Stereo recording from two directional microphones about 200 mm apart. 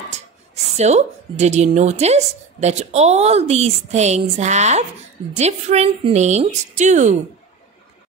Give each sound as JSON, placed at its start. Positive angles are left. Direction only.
{"t": 0.7, "sound": "a woman's voice", "side_deg": -35}